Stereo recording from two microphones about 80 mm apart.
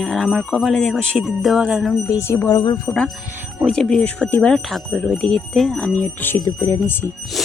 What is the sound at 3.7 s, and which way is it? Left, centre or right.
Speech, centre.